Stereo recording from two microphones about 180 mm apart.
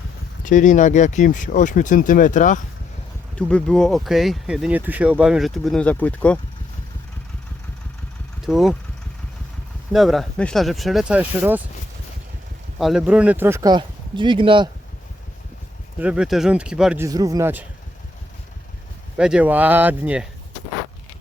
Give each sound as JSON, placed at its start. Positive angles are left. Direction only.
{"t": 0.4, "sound": "speech", "side_deg": 45}
{"t": 3.3, "sound": "speech", "side_deg": 5}
{"t": 8.4, "sound": "speech", "side_deg": 0}
{"t": 9.9, "sound": "speech", "side_deg": 0}
{"t": 12.8, "sound": "speech", "side_deg": -5}
{"t": 16.0, "sound": "speech", "side_deg": -5}
{"t": 17.0, "sound": "speech", "side_deg": -20}
{"t": 19.1, "sound": "speech", "side_deg": -5}